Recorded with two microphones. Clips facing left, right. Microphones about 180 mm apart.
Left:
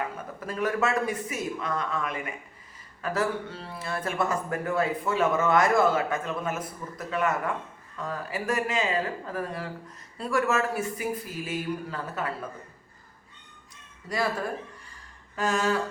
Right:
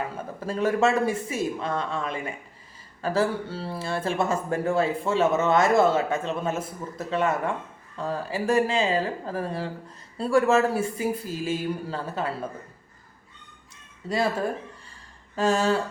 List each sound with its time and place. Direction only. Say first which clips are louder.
0.3 s speech: right 4 dB; 30° right (ahead or behind)
15.4 s speech: right 4 dB; 30° right (ahead or behind)